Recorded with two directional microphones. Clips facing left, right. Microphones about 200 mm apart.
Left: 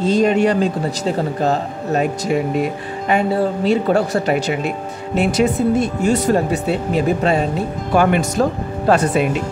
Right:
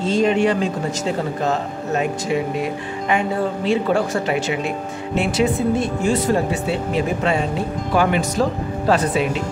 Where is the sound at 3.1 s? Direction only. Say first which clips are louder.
Left 4 dB; 40° left (ahead or behind).